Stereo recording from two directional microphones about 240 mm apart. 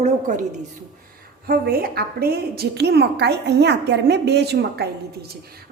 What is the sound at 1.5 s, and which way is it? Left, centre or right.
A woman's voice, right.